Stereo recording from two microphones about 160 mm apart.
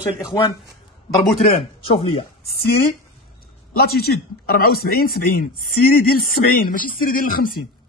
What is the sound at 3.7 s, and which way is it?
Speech, 75° left (ahead or behind).